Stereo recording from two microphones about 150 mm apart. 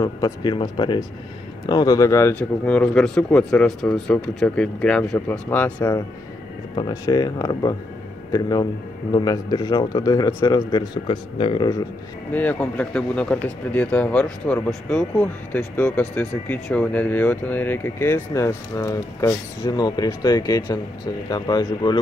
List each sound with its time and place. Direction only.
0.0 s a man's voice: 25° left (ahead or behind)
6.7 s a man's voice: 30° left (ahead or behind)
12.3 s a man's voice: 10° left (ahead or behind); by 21.9 s 25° left (ahead or behind)